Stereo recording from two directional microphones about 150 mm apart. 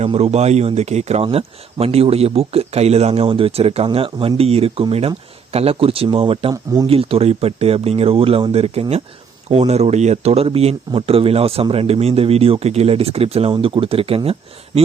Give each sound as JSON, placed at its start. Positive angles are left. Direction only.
{"t": 0.0, "sound": "speech", "side_deg": -45}